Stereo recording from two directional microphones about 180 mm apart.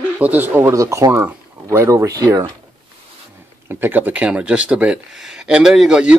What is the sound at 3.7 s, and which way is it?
Speech, 10° right (ahead or behind).